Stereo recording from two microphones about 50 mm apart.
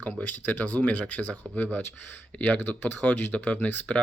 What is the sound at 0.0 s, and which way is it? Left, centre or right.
Speech, left.